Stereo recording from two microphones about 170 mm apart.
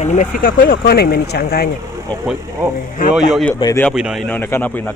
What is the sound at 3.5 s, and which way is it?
Speech, 15° left (ahead or behind).